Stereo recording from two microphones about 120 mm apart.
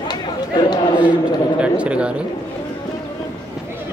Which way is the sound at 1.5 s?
10° right (ahead or behind).